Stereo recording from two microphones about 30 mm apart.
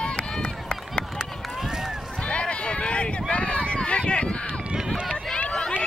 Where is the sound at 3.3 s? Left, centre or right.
Left.